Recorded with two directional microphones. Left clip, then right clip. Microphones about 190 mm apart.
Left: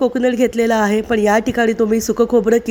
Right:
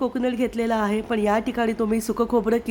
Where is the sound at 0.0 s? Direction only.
20° left (ahead or behind).